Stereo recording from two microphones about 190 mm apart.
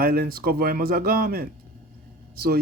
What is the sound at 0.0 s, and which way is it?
Speech, 50° right (ahead or behind).